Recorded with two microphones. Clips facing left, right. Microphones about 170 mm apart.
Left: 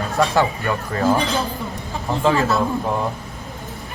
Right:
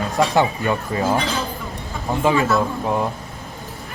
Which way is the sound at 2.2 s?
15° right (ahead or behind).